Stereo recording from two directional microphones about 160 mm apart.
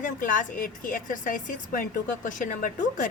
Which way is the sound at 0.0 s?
55° left (ahead or behind).